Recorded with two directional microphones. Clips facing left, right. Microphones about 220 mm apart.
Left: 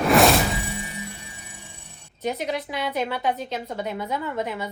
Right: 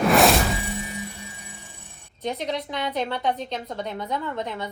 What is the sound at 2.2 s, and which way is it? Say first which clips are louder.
A woman's voice: left 1 dB; 5° left (ahead or behind).